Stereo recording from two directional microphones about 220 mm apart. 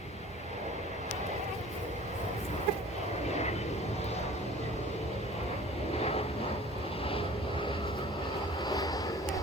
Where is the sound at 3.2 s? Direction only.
30° left (ahead or behind).